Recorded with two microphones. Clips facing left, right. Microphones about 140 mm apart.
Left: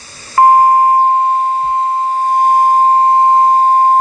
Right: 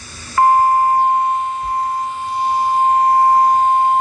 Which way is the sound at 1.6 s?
35° left (ahead or behind).